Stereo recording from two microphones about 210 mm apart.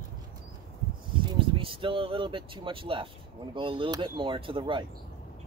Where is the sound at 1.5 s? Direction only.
25° right (ahead or behind).